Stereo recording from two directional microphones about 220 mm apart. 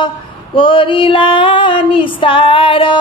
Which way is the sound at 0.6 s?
25° left (ahead or behind).